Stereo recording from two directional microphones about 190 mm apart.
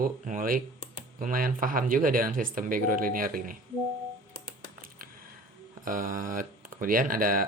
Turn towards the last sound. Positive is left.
turn(degrees=-45)  # may be behind; listen again after turning